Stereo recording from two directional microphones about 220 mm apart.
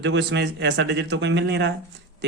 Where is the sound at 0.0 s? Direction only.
55° right (ahead or behind).